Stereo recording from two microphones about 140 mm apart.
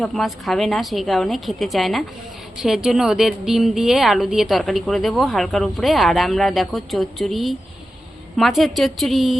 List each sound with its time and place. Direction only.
0.0 s a woman's voice: centre (ahead or behind)